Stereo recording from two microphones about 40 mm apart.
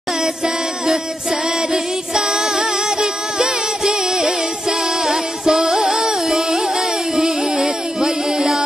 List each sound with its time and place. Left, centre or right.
1.7 s music: centre